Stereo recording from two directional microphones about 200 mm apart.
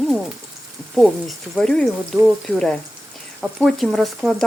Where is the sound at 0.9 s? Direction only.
Centre (ahead or behind).